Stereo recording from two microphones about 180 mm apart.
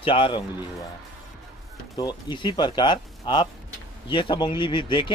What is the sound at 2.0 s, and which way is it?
Speech, 25° left (ahead or behind).